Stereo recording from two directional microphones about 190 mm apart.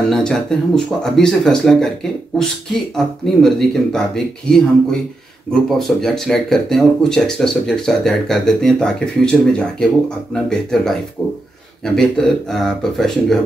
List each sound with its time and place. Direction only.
0.1 s speech: 5° left (ahead or behind)
5.7 s speech: centre (ahead or behind)